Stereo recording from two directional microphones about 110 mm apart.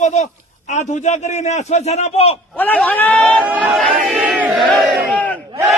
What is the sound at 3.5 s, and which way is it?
Speech, 15° right (ahead or behind).